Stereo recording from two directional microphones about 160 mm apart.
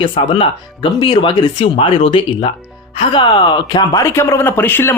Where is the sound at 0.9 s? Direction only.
25° left (ahead or behind).